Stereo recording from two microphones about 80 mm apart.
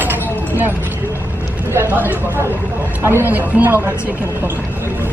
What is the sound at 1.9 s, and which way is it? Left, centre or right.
Speech, right.